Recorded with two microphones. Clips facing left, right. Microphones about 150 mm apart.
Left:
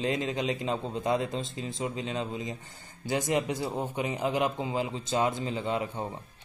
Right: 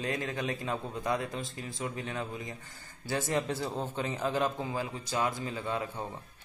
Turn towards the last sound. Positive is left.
turn(degrees=20)  # may be behind; listen again after turning